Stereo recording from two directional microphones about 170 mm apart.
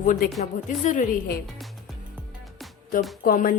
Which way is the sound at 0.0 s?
50° left (ahead or behind).